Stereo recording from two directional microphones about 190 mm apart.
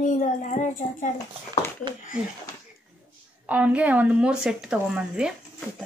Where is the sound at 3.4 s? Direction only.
10° right (ahead or behind).